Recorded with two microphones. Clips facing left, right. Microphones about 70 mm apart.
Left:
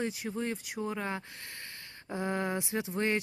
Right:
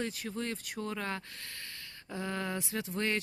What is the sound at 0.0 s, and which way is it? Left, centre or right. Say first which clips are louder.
Speech: left 3 dB; centre.